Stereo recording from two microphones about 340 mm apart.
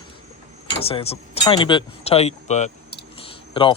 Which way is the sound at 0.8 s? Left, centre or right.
Centre.